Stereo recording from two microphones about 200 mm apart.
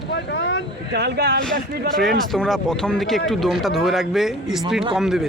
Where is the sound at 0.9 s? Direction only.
55° right (ahead or behind).